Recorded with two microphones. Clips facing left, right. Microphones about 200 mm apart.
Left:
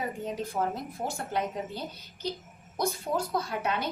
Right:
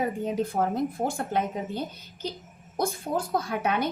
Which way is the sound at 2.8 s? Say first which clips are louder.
Right 2 dB; 50° right (ahead or behind).